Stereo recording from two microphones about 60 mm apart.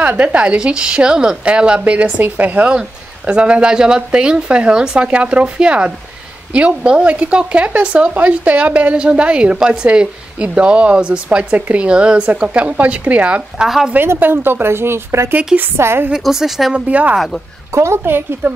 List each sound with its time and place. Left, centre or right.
0.0 s speech: right
14.0 s speech: right
16.1 s speech: centre
16.7 s speech: right
17.7 s speech: right